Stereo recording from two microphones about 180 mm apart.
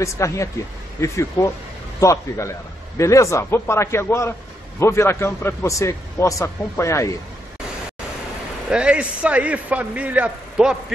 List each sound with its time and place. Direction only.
0.0 s a man's voice: 15° left (ahead or behind)
8.6 s a man's voice: 5° right (ahead or behind)